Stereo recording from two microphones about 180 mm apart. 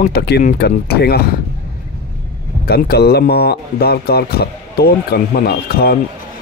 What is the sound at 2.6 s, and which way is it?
Speech, 60° left (ahead or behind).